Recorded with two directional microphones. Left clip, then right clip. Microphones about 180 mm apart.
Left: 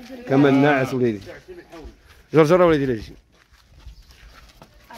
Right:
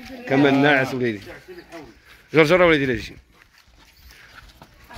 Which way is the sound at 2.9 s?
20° left (ahead or behind).